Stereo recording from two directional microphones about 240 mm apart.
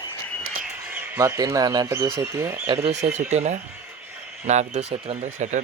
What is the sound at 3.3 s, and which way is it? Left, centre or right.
Speech, right.